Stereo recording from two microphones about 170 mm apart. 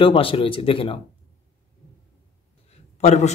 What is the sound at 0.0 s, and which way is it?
A man's voice, 30° left (ahead or behind).